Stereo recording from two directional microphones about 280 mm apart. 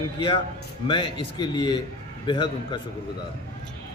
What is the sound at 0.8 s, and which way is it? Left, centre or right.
A man's voice, centre.